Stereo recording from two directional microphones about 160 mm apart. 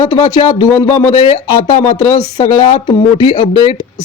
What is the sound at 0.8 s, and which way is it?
A man's voice, 45° left (ahead or behind).